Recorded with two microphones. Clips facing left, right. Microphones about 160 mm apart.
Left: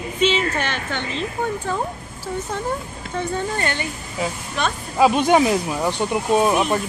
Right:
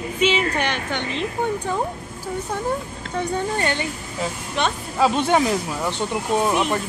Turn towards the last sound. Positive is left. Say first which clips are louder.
# left 3 dB
turn(degrees=15)  # may be behind; listen again after turning